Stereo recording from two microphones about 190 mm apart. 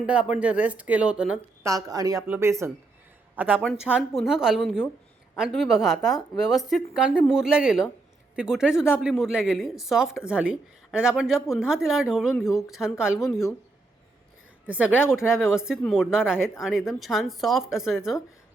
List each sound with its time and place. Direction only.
0.0 s speech: 5° right (ahead or behind)
1.6 s a woman's voice: 20° right (ahead or behind); by 13.5 s centre (ahead or behind)
14.7 s a woman's voice: 5° right (ahead or behind)